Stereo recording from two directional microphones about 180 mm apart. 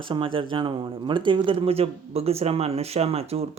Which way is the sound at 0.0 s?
30° right (ahead or behind).